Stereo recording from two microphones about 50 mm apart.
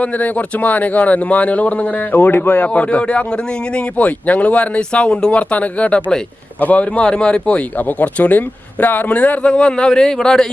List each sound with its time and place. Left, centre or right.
0.0 s a man's voice: left
2.1 s a man's voice: left
2.7 s a man's voice: left
7.0 s a man's voice: centre
9.5 s speech: centre